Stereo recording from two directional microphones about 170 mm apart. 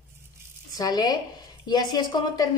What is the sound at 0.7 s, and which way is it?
A woman's voice, 20° left (ahead or behind).